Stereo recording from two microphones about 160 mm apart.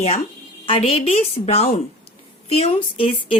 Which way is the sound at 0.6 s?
35° left (ahead or behind).